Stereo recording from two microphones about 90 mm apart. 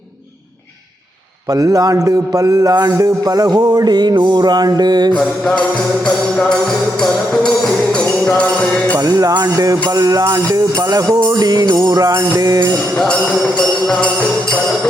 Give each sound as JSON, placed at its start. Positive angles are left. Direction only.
{"t": 1.5, "sound": "speech", "side_deg": -45}
{"t": 6.1, "sound": "music", "side_deg": 10}
{"t": 9.0, "sound": "speech", "side_deg": -45}
{"t": 11.9, "sound": "music", "side_deg": -45}
{"t": 13.6, "sound": "music", "side_deg": 10}